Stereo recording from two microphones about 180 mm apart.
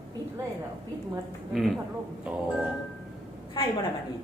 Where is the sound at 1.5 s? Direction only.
Centre (ahead or behind).